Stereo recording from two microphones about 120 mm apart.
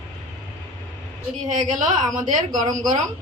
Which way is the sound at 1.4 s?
90° right.